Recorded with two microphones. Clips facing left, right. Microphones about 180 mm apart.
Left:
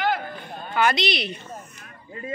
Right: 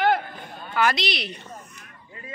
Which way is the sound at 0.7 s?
Centre (ahead or behind).